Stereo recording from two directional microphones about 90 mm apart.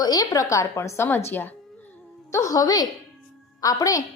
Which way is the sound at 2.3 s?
40° left (ahead or behind).